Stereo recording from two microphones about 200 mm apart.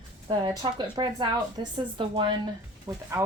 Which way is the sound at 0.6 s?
20° right (ahead or behind).